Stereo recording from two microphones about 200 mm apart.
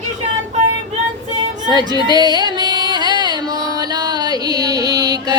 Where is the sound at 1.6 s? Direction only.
20° right (ahead or behind).